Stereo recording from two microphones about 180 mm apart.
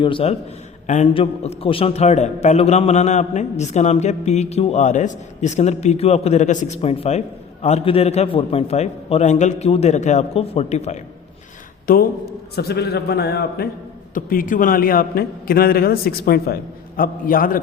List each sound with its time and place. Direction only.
0.0 s a man's voice: 30° left (ahead or behind)
11.9 s a man's voice: 50° left (ahead or behind)
12.5 s a man's voice: 65° left (ahead or behind)
14.1 s a man's voice: 50° left (ahead or behind)